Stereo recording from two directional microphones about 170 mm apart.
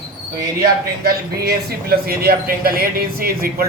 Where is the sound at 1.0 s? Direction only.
65° right (ahead or behind).